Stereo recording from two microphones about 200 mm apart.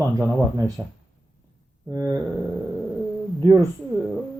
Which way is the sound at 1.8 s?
15° right (ahead or behind).